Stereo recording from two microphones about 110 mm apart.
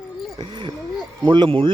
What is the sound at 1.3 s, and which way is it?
Speech, 50° right (ahead or behind).